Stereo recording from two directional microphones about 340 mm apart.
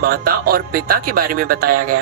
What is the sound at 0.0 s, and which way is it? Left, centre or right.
Speech, right.